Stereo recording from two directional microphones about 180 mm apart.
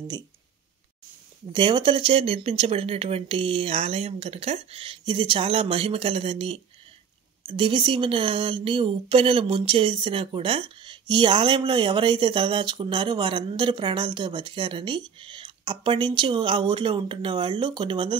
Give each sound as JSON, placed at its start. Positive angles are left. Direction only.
{"t": 1.5, "sound": "a woman's voice", "side_deg": -25}